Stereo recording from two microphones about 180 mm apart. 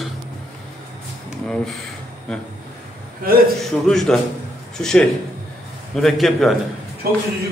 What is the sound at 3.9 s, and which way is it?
A man's voice, centre (ahead or behind).